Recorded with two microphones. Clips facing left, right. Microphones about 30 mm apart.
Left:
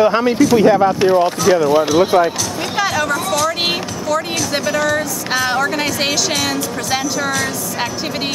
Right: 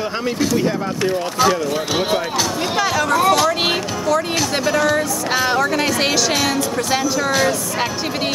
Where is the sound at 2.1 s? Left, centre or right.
Centre.